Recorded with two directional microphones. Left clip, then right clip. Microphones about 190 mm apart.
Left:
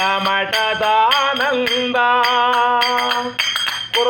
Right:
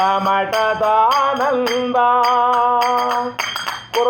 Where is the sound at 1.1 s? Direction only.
15° left (ahead or behind).